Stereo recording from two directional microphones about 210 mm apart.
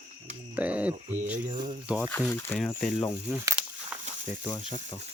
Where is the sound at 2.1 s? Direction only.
10° left (ahead or behind).